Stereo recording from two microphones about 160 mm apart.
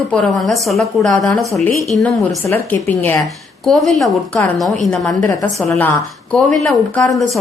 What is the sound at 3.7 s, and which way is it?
Speech, centre (ahead or behind).